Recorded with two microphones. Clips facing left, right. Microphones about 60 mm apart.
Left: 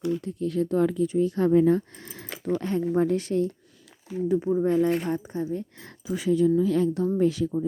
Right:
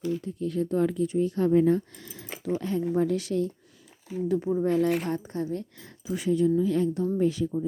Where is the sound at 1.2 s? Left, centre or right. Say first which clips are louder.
Left 2 dB; left.